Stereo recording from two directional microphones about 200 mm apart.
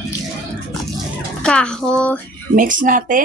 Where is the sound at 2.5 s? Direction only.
40° right (ahead or behind).